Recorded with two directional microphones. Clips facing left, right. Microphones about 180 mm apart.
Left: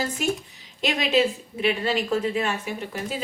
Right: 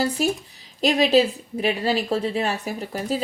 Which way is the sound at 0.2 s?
35° right (ahead or behind).